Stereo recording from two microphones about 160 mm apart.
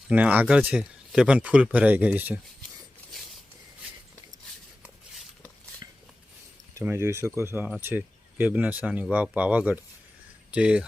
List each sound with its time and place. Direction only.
0.1 s speech: 10° right (ahead or behind)
5.8 s a sound: 25° right (ahead or behind)
6.7 s speech: 15° right (ahead or behind)